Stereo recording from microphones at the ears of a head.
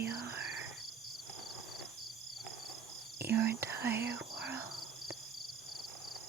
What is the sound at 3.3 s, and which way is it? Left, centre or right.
Speech, right.